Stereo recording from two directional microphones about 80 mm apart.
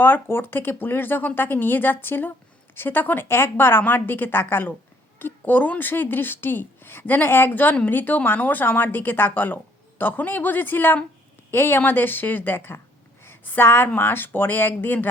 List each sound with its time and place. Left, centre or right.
0.0 s speech: left